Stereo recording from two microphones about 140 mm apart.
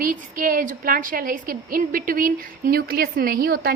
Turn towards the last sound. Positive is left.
turn(degrees=-90)